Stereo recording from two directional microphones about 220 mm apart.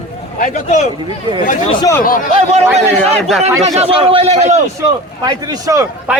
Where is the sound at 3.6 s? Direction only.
30° right (ahead or behind).